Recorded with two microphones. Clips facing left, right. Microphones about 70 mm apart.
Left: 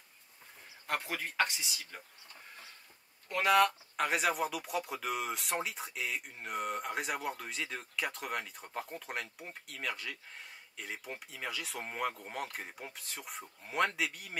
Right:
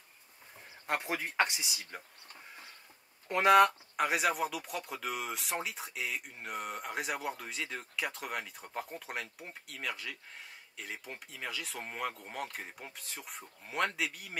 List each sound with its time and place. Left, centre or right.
0.8 s speech: right
2.3 s chicken: centre
3.3 s speech: right
3.9 s speech: centre